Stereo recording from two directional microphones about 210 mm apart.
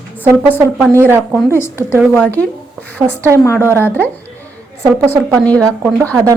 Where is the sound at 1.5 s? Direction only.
10° left (ahead or behind).